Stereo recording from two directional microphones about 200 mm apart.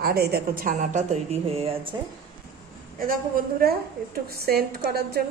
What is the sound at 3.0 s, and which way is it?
A woman's voice, 45° right (ahead or behind).